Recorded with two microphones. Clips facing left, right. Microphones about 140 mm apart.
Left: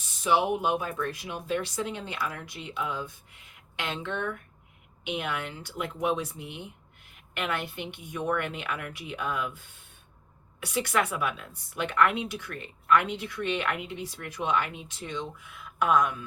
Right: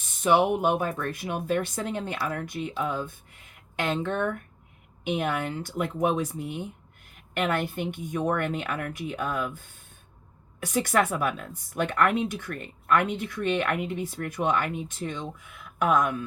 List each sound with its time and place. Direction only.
0.2 s speech: 55° right (ahead or behind)
10.6 s speech: 45° right (ahead or behind)